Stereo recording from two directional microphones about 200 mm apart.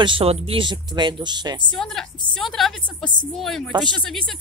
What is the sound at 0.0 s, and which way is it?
Speech, 25° right (ahead or behind).